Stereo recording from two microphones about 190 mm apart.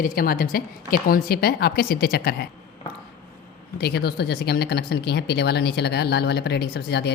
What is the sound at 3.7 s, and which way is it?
Speech, 60° left (ahead or behind).